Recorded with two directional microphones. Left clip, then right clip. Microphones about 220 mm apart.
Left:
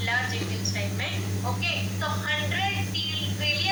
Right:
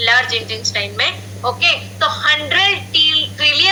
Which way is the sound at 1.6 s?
40° right (ahead or behind).